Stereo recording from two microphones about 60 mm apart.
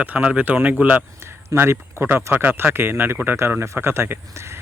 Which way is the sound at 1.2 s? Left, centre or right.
Right.